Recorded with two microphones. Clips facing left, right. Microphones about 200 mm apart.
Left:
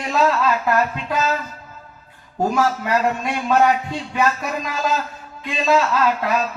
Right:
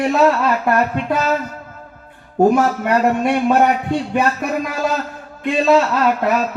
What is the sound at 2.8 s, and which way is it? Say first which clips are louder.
A man's voice: right 5 dB; 60° right (ahead or behind).